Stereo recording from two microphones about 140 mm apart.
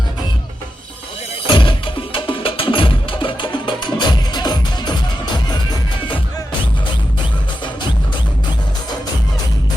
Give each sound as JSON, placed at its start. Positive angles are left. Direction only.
{"t": 1.5, "sound": "music", "side_deg": 35}